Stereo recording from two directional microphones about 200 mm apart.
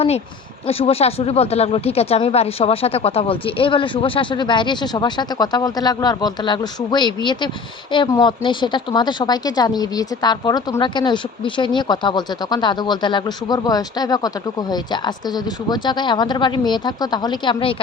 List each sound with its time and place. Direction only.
0.7 s speech: 30° left (ahead or behind)